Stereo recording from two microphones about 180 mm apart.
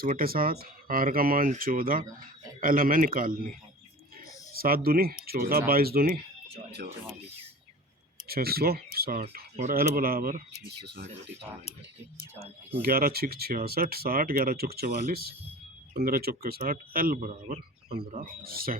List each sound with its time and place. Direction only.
0.0 s speech: 55° right (ahead or behind)
4.5 s speech: 55° right (ahead or behind)
8.3 s speech: 60° right (ahead or behind)
9.6 s speech: 45° right (ahead or behind)
10.7 s speech: 65° right (ahead or behind)
12.8 s speech: 55° right (ahead or behind)